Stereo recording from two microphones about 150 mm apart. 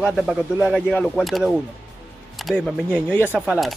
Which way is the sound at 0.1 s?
Centre (ahead or behind).